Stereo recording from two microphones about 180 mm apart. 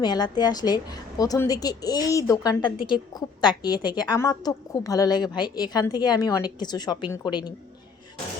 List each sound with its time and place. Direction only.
0.0 s a woman's voice: 20° left (ahead or behind)